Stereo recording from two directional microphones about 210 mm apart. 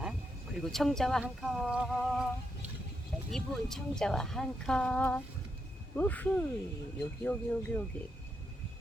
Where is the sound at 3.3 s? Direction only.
Centre (ahead or behind).